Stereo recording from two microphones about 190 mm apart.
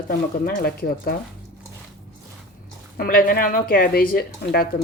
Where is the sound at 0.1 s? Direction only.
50° left (ahead or behind).